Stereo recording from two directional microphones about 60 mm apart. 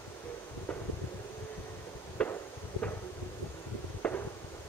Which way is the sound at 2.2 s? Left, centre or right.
Centre.